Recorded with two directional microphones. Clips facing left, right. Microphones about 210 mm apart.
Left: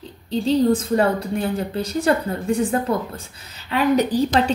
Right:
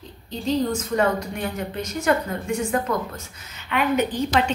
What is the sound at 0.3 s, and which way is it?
A woman's voice, 30° left (ahead or behind).